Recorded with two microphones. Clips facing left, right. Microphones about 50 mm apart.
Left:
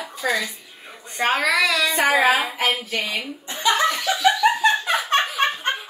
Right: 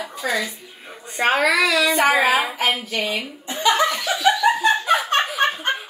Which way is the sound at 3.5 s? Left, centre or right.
Right.